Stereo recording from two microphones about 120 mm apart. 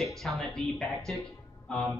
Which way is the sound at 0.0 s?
Centre (ahead or behind).